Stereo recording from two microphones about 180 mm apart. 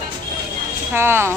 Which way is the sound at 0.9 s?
15° right (ahead or behind).